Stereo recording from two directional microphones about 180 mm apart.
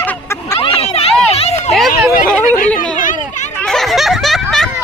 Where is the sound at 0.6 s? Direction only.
30° left (ahead or behind).